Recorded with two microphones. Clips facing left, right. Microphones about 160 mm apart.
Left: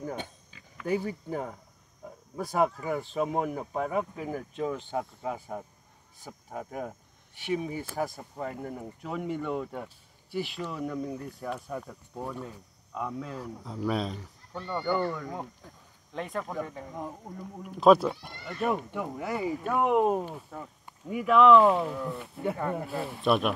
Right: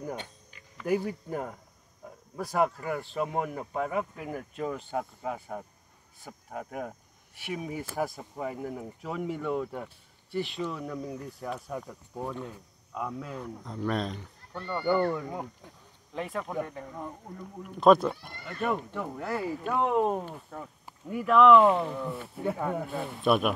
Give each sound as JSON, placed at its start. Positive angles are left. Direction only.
{"t": 0.7, "sound": "speech", "side_deg": 0}
{"t": 16.1, "sound": "speech", "side_deg": 0}